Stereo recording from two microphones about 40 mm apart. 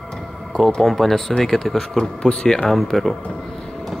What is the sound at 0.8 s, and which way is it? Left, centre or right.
Speech, centre.